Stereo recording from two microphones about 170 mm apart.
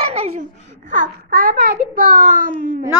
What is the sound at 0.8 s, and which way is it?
A child's voice, 50° right (ahead or behind).